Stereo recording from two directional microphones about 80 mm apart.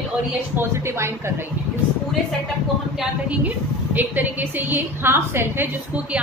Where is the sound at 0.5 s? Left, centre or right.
Right.